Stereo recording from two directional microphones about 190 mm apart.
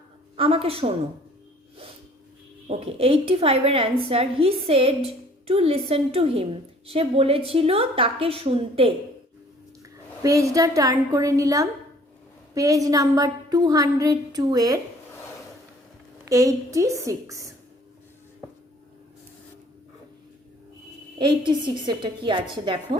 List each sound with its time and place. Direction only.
0.3 s a woman's voice: 30° right (ahead or behind)
2.6 s a woman's voice: 30° right (ahead or behind)
10.2 s a woman's voice: 15° right (ahead or behind)
16.3 s a woman's voice: 15° right (ahead or behind)
21.2 s a woman's voice: 25° right (ahead or behind)